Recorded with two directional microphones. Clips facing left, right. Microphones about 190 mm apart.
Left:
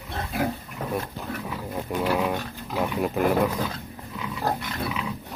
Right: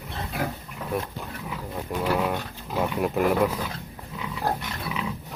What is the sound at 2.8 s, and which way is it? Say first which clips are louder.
Speech: right 1 dB; centre (ahead or behind).